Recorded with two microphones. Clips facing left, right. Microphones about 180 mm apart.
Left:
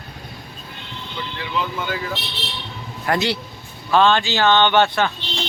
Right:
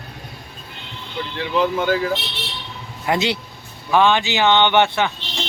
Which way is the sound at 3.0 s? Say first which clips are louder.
Right 1 dB; 20° right (ahead or behind).